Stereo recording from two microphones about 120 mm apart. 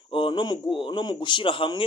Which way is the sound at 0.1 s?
45° left (ahead or behind).